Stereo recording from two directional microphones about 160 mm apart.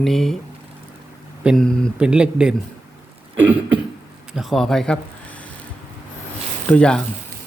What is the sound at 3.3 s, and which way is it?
Cough, 10° right (ahead or behind).